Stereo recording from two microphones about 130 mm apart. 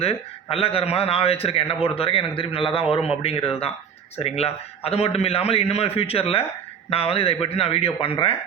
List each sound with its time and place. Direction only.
0.5 s a man's voice: 45° left (ahead or behind)